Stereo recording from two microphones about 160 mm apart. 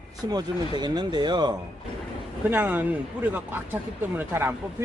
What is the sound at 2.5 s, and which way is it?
Speech, 10° right (ahead or behind).